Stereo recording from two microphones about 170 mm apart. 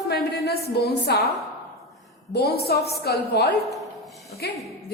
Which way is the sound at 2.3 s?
70° left (ahead or behind).